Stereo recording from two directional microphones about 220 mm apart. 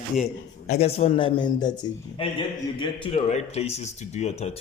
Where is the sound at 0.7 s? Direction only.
30° left (ahead or behind).